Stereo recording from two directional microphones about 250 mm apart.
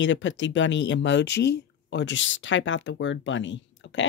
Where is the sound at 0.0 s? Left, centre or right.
Left.